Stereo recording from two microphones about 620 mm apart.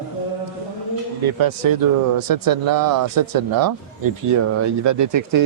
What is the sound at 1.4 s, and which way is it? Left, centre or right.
Speech, right.